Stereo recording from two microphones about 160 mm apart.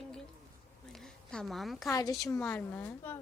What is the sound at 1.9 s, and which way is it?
Speech, 20° left (ahead or behind).